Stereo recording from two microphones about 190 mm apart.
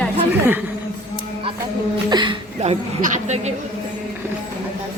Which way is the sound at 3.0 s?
40° right (ahead or behind).